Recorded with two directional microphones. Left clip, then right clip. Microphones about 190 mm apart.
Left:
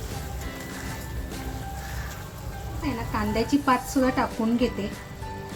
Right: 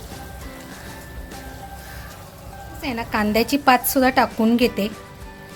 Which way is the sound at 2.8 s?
60° right (ahead or behind).